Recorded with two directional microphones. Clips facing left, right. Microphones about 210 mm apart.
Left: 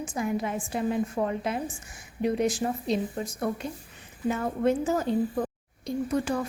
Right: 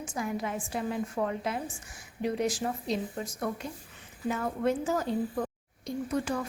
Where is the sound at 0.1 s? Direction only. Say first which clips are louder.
Left 3 dB; 20° left (ahead or behind).